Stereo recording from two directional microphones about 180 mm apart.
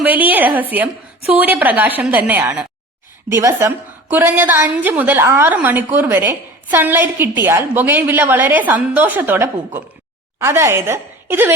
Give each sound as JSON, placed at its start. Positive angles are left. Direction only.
{"t": 0.0, "sound": "a woman's voice", "side_deg": -10}